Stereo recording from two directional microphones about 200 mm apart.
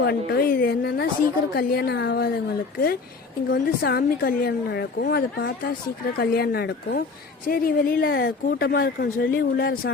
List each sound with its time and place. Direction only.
0.0 s speech: 50° left (ahead or behind)
3.5 s speech: 50° left (ahead or behind)